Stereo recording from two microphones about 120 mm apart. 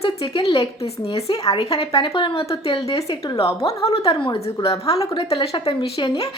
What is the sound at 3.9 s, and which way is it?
A woman's voice, 55° left (ahead or behind).